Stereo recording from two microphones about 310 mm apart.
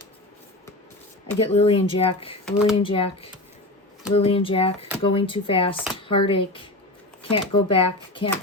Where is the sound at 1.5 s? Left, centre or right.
Centre.